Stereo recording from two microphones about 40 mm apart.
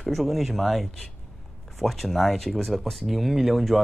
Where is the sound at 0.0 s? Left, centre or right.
Centre.